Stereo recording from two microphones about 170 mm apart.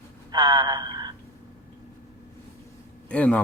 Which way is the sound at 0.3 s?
25° right (ahead or behind).